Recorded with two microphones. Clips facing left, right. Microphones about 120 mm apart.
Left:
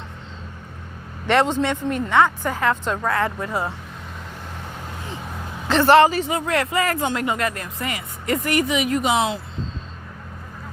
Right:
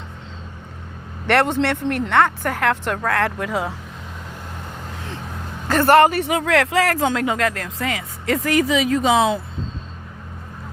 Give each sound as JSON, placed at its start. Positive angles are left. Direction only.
{"t": 1.3, "sound": "speech", "side_deg": -65}
{"t": 5.6, "sound": "speech", "side_deg": -55}